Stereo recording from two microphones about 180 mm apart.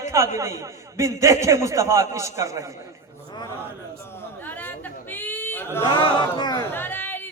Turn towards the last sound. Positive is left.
turn(degrees=10)  # may be behind; listen again after turning